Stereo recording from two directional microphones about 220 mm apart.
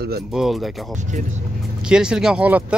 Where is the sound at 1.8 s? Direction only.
5° right (ahead or behind).